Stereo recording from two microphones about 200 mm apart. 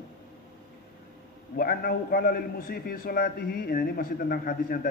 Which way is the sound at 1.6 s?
50° left (ahead or behind).